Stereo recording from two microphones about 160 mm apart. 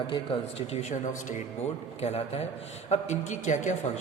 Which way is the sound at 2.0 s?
40° left (ahead or behind).